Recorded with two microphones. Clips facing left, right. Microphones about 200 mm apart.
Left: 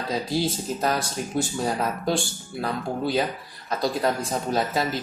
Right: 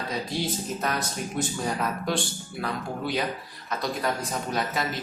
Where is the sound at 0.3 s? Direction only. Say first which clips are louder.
Left 4 dB; 30° left (ahead or behind).